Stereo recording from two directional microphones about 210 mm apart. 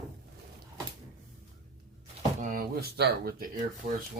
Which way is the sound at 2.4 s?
40° right (ahead or behind).